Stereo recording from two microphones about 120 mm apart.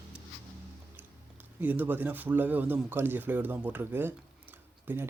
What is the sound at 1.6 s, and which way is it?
Speech, 15° right (ahead or behind).